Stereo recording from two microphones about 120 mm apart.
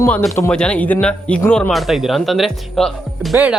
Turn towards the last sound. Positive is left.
turn(degrees=0)  # may be behind; listen again after turning